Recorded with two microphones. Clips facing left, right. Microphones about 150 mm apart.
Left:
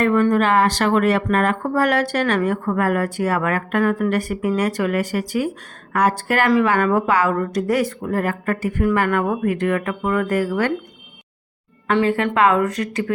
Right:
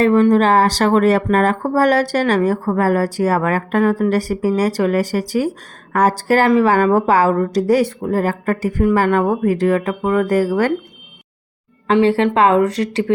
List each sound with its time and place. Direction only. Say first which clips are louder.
0.0 s speech: right 4 dB; 30° right (ahead or behind)
11.9 s a woman's voice: right 5 dB; 25° right (ahead or behind)